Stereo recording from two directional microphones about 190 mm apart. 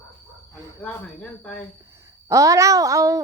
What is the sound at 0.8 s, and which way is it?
Speech, 5° left (ahead or behind).